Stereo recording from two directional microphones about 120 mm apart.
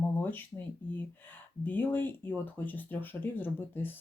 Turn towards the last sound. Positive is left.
turn(degrees=15)  # may be behind; listen again after turning